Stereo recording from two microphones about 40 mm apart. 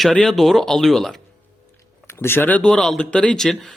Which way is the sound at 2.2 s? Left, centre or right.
Left.